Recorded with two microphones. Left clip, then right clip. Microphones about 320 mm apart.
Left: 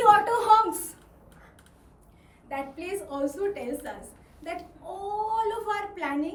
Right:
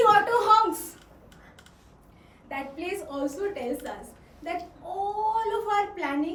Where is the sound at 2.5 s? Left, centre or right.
Centre.